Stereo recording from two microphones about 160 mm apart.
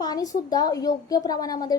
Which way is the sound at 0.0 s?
25° left (ahead or behind).